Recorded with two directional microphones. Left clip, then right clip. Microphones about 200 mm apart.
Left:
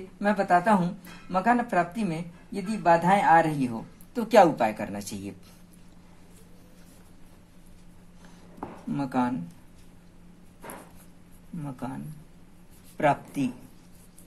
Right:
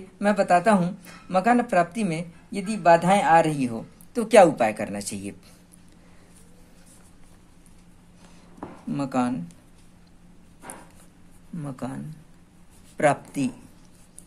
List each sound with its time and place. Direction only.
0.2 s speech: 35° right (ahead or behind)
8.9 s speech: 25° right (ahead or behind)
11.6 s speech: 30° right (ahead or behind)